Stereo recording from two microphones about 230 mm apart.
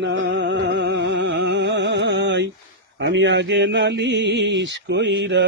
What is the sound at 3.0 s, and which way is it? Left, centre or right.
A man's voice, right.